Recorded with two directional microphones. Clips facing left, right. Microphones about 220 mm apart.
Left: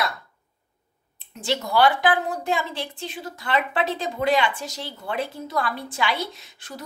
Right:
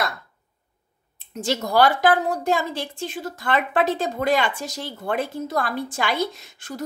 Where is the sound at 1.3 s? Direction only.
45° right (ahead or behind).